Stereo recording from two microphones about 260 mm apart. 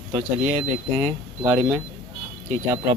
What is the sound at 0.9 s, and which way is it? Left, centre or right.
Speech, centre.